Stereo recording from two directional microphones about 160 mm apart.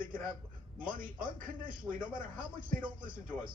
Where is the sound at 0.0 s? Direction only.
60° right (ahead or behind).